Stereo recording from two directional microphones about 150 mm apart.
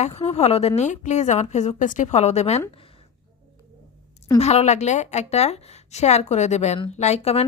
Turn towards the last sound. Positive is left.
turn(degrees=45)  # may be behind; listen again after turning